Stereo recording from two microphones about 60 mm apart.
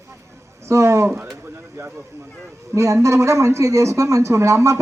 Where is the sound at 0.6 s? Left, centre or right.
Right.